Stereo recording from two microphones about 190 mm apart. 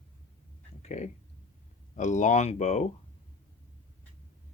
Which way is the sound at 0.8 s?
35° left (ahead or behind).